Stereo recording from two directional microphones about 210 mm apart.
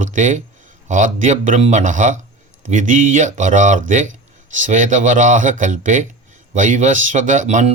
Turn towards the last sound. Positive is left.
turn(degrees=-35)  # may be behind; listen again after turning